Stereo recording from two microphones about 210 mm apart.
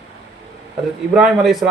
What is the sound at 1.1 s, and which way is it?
Speech, 5° right (ahead or behind).